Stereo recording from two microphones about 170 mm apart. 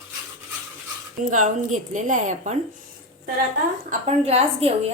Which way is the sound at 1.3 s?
50° right (ahead or behind).